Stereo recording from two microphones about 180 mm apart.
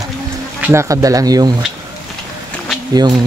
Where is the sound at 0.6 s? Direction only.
15° right (ahead or behind).